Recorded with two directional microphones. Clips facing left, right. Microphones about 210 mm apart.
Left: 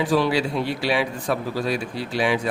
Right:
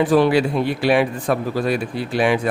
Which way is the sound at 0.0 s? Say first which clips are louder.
Right 5 dB; 55° right (ahead or behind).